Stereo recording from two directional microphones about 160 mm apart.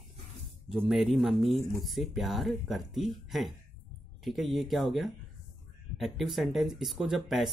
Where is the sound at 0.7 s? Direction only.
5° right (ahead or behind).